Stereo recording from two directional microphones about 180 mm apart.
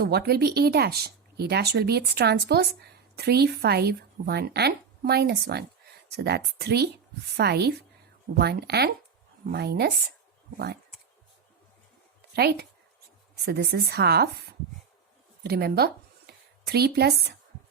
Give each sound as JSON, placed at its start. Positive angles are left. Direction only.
{"t": 0.0, "sound": "speech", "side_deg": -65}
{"t": 12.3, "sound": "speech", "side_deg": -65}
{"t": 15.4, "sound": "speech", "side_deg": -60}